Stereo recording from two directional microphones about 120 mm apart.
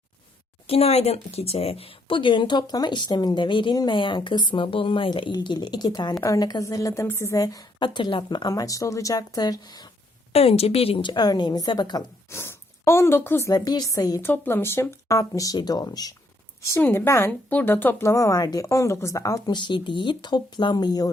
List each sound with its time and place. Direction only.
0.7 s speech: 60° left (ahead or behind); by 9.9 s 35° left (ahead or behind)
10.3 s speech: 55° left (ahead or behind); by 12.0 s 35° left (ahead or behind)
12.3 s speech: 20° left (ahead or behind)
13.7 s speech: 30° left (ahead or behind)
14.2 s speech: 15° left (ahead or behind); by 16.1 s 30° left (ahead or behind)
16.7 s speech: 15° left (ahead or behind); by 21.1 s 35° left (ahead or behind)